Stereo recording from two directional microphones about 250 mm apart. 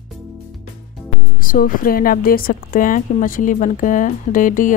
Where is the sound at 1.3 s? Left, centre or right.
Left.